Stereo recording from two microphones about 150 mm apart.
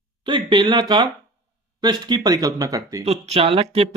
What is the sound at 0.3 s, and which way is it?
Speech, 30° right (ahead or behind).